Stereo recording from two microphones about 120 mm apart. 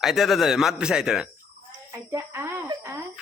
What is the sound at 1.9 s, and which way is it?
Speech, 25° right (ahead or behind).